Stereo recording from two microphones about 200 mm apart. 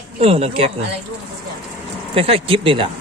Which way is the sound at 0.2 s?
30° right (ahead or behind).